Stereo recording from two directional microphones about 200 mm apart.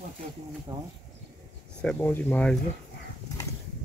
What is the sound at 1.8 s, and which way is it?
Speech, 10° left (ahead or behind).